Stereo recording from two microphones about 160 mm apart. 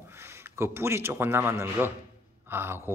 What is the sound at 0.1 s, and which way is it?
Speech, 15° right (ahead or behind).